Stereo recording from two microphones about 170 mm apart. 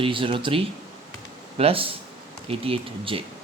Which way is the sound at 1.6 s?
35° right (ahead or behind).